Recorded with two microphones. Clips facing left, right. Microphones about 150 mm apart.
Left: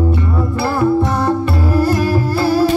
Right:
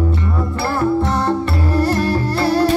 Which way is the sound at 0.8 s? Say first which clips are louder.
Left 2 dB; 10° left (ahead or behind).